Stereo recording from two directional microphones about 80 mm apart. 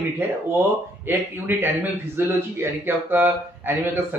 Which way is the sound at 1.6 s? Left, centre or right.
Right.